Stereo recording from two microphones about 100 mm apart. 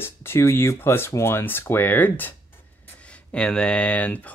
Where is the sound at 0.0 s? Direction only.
25° left (ahead or behind).